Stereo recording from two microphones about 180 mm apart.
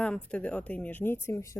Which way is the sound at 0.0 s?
5° left (ahead or behind).